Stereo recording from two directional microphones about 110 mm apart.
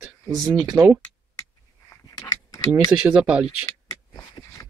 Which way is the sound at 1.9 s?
30° left (ahead or behind).